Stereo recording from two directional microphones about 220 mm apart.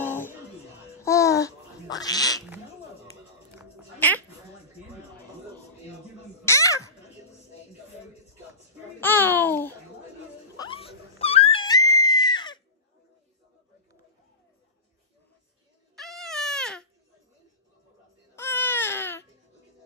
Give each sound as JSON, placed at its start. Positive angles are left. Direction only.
{"t": 0.0, "sound": "music", "side_deg": 10}
{"t": 1.0, "sound": "babbling", "side_deg": 15}
{"t": 4.0, "sound": "a sound", "side_deg": 5}
{"t": 6.4, "sound": "babbling", "side_deg": 15}
{"t": 9.0, "sound": "babbling", "side_deg": 10}
{"t": 10.6, "sound": "screaming", "side_deg": 25}
{"t": 16.0, "sound": "baby cry", "side_deg": 0}
{"t": 18.3, "sound": "baby cry", "side_deg": 10}